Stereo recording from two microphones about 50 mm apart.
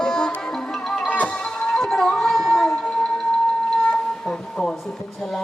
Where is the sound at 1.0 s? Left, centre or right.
Left.